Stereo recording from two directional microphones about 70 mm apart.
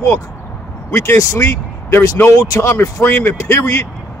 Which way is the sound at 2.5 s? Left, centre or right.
Left.